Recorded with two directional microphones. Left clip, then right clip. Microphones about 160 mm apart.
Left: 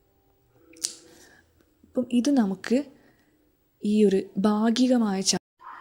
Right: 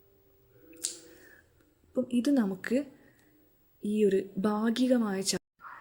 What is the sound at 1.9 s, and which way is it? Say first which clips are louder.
Speech: left 4 dB; 25° left (ahead or behind).